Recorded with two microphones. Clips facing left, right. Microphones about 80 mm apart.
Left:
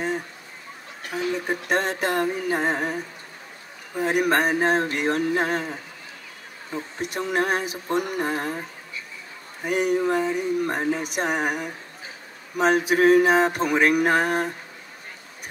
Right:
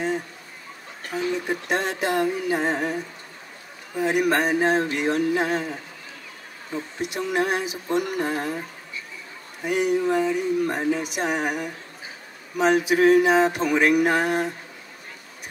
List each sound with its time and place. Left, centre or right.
1.5 s speech: left
4.0 s speech: left
7.0 s speech: left
9.7 s speech: left